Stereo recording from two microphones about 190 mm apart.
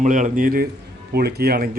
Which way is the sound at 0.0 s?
40° right (ahead or behind).